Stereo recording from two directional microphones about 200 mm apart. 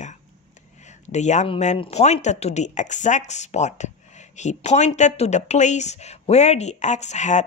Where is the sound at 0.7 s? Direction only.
35° left (ahead or behind).